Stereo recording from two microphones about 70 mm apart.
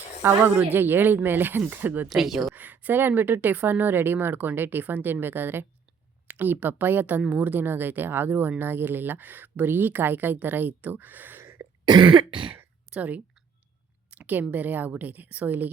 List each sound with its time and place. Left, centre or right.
0.2 s a woman's voice: right
0.7 s speech: right
2.0 s speech: centre
2.6 s speech: right
11.9 s cough: right
12.9 s speech: right
14.2 s a sound: right
14.5 s speech: right